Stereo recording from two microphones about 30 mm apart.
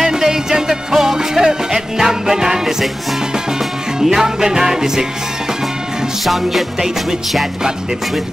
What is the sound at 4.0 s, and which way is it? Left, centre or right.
Music, centre.